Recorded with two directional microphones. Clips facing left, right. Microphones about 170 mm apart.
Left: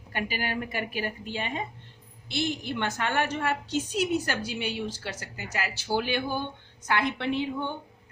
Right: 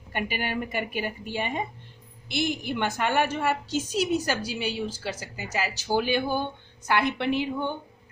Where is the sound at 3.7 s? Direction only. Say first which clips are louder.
Left 1 dB; 40° right (ahead or behind).